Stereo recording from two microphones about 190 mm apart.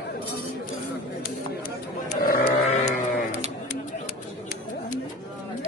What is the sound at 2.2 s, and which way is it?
Sheep, 50° left (ahead or behind).